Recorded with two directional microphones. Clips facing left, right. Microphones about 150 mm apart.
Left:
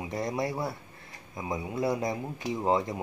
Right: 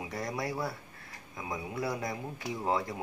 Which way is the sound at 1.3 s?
20° left (ahead or behind).